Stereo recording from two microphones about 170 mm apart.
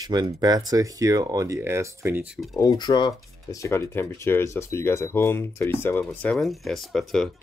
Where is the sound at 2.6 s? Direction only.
25° left (ahead or behind).